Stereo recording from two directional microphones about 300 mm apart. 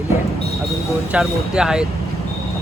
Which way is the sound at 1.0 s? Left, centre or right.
Centre.